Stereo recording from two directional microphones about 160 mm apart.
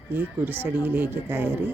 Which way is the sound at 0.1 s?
10° right (ahead or behind).